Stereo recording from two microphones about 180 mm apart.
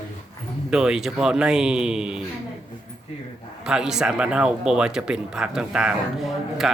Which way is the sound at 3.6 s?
5° right (ahead or behind).